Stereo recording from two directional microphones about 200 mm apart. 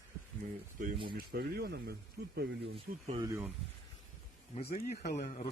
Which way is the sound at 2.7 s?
25° right (ahead or behind).